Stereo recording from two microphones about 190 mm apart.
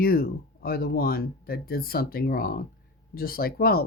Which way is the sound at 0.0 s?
50° left (ahead or behind).